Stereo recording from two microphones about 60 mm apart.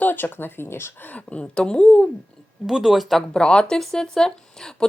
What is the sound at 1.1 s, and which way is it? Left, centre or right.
Speech, centre.